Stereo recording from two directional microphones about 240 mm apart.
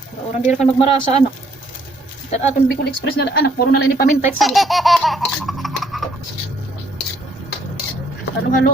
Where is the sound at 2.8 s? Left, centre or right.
Left.